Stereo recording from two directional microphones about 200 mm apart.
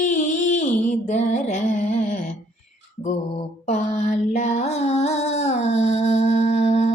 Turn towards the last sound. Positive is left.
turn(degrees=30)  # may be behind; listen again after turning